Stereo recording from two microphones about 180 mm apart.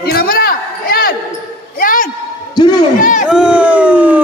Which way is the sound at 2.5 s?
20° left (ahead or behind).